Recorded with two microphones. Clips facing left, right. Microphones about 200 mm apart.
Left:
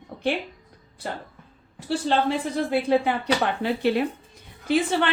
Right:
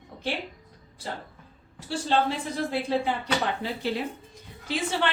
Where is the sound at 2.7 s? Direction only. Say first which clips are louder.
Left 6 dB; 60° left (ahead or behind).